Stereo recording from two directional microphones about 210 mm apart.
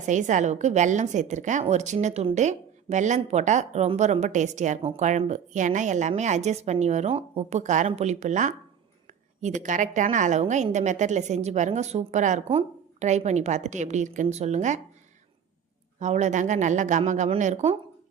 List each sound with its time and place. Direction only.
0.0 s a woman's voice: 35° right (ahead or behind)
16.0 s a woman's voice: 35° right (ahead or behind)